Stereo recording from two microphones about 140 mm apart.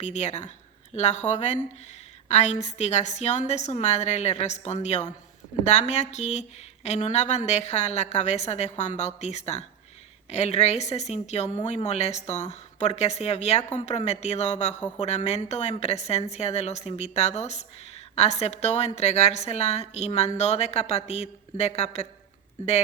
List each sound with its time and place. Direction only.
0.0 s a woman's voice: 55° left (ahead or behind)